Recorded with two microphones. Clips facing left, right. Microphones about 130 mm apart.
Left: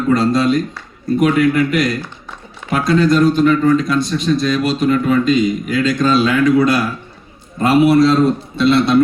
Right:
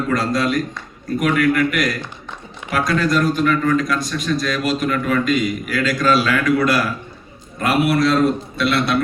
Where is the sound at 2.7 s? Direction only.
25° left (ahead or behind).